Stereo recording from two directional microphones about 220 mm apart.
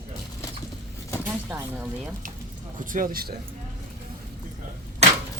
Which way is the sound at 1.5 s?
10° right (ahead or behind).